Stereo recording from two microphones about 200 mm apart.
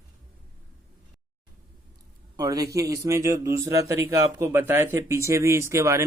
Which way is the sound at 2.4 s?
15° right (ahead or behind).